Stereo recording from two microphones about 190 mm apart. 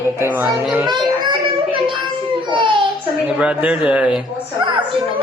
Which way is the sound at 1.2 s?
25° right (ahead or behind).